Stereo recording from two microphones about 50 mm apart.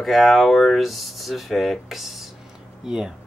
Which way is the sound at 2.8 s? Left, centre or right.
Centre.